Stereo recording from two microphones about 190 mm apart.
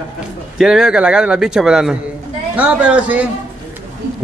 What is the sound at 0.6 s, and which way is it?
A man's voice, centre (ahead or behind).